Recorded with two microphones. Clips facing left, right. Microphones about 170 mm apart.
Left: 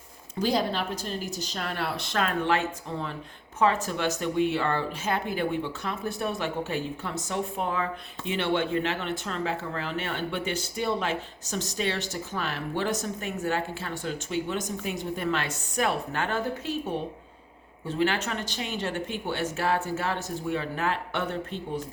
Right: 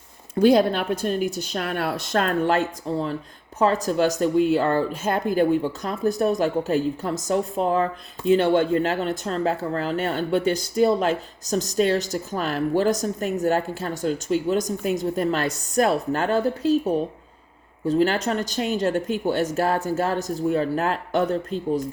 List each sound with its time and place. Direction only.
0.3 s speech: 55° right (ahead or behind); by 21.6 s 40° right (ahead or behind)